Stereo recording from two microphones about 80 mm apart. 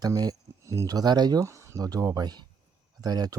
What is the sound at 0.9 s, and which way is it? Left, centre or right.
Speech, right.